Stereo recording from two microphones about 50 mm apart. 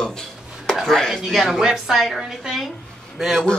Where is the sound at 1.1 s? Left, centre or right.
Centre.